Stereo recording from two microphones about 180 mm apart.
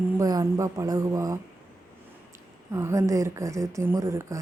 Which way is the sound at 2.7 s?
15° right (ahead or behind).